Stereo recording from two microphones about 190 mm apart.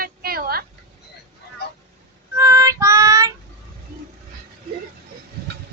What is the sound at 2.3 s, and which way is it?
Child singing, 15° right (ahead or behind).